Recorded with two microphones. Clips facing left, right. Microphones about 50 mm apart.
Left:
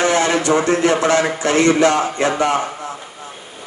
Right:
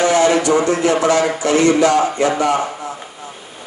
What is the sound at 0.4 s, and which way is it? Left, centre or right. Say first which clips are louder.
A man's voice: even; left.